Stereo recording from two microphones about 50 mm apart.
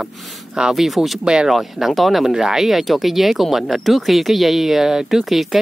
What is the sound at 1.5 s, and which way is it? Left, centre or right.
Speech, centre.